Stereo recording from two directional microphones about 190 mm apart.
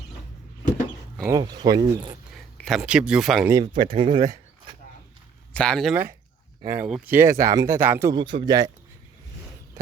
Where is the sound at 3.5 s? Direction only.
20° right (ahead or behind).